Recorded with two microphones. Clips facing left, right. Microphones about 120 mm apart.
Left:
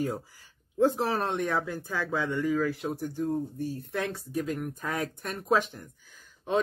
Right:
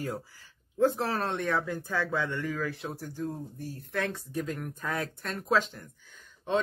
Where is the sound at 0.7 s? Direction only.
15° left (ahead or behind).